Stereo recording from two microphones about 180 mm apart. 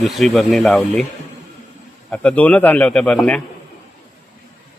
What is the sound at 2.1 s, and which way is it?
A man's voice, 5° left (ahead or behind).